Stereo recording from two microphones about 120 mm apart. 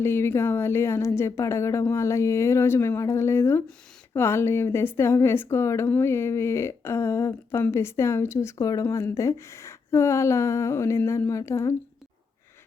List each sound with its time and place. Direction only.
0.0 s a woman's voice: 20° left (ahead or behind)